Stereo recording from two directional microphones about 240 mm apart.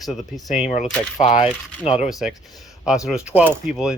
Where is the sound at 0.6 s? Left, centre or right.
Left.